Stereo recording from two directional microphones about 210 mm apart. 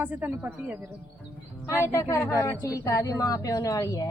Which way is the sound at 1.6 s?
15° left (ahead or behind).